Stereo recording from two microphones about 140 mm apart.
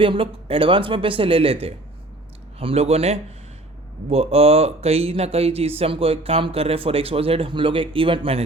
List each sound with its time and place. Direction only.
0.0 s speech: 40° right (ahead or behind)
2.6 s speech: 45° right (ahead or behind)